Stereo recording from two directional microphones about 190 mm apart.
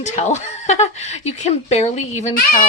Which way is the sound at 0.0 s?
40° left (ahead or behind).